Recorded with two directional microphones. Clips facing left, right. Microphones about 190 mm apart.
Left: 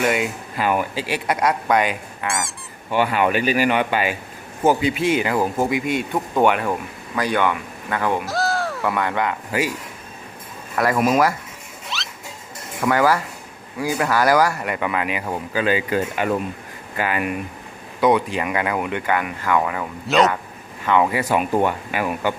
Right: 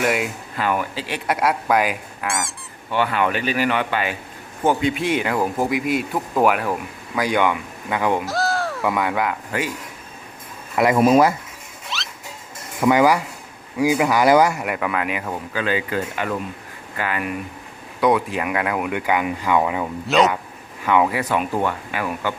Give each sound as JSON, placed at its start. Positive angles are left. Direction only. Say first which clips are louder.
{"t": 0.0, "sound": "speech", "louder": "left 1 dB", "side_deg": 0}
{"t": 0.5, "sound": "speech", "louder": "left 2 dB", "side_deg": 15}
{"t": 1.3, "sound": "speech", "louder": "even", "side_deg": -5}
{"t": 2.9, "sound": "speech", "louder": "left 2 dB", "side_deg": 15}
{"t": 7.2, "sound": "speech", "louder": "right 1 dB", "side_deg": -15}
{"t": 8.2, "sound": "speech", "louder": "even", "side_deg": 0}
{"t": 10.8, "sound": "speech", "louder": "right 3 dB", "side_deg": -25}
{"t": 11.9, "sound": "rodents", "louder": "even", "side_deg": 0}
{"t": 12.8, "sound": "speech", "louder": "right 2 dB", "side_deg": -15}
{"t": 14.6, "sound": "speech", "louder": "even", "side_deg": 0}
{"t": 15.3, "sound": "speech", "louder": "left 5 dB", "side_deg": 10}
{"t": 18.0, "sound": "speech", "louder": "left 1 dB", "side_deg": 0}
{"t": 20.1, "sound": "speech", "louder": "even", "side_deg": 0}
{"t": 21.2, "sound": "speech", "louder": "left 2 dB", "side_deg": 15}